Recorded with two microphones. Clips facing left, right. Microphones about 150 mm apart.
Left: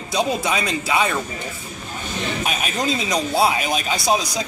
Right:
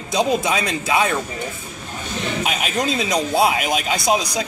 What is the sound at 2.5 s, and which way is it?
A man's voice, 20° right (ahead or behind).